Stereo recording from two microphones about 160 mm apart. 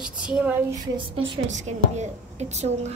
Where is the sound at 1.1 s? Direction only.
45° right (ahead or behind).